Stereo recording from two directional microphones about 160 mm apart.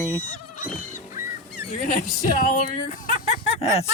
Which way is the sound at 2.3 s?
50° left (ahead or behind).